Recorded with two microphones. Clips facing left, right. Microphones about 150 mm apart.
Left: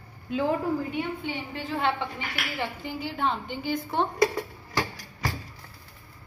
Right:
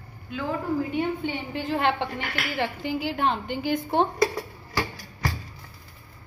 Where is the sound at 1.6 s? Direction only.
75° right (ahead or behind).